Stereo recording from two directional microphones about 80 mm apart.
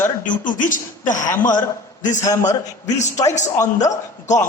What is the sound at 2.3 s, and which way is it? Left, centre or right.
A man's voice, left.